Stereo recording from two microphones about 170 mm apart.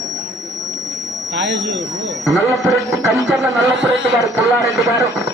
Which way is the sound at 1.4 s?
90° right.